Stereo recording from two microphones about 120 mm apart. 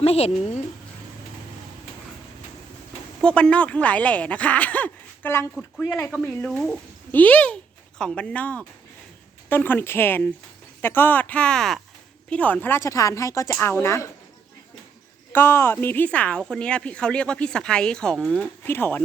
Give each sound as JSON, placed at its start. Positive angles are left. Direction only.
{"t": 0.0, "sound": "speech", "side_deg": 60}
{"t": 3.2, "sound": "speech", "side_deg": 10}
{"t": 5.5, "sound": "speech", "side_deg": 0}
{"t": 15.3, "sound": "speech", "side_deg": 20}
{"t": 18.6, "sound": "speech", "side_deg": 15}